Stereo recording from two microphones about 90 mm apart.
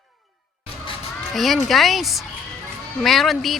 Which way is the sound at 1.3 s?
Centre (ahead or behind).